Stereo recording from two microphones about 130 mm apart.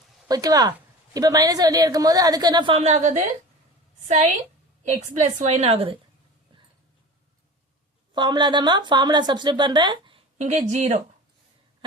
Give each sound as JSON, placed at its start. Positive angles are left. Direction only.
{"t": 0.3, "sound": "a woman's voice", "side_deg": -30}
{"t": 2.7, "sound": "a woman's voice", "side_deg": -60}
{"t": 4.8, "sound": "a woman's voice", "side_deg": -65}
{"t": 8.1, "sound": "speech", "side_deg": -35}
{"t": 10.3, "sound": "a woman's voice", "side_deg": -65}